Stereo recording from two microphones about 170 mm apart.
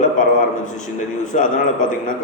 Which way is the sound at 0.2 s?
50° left (ahead or behind).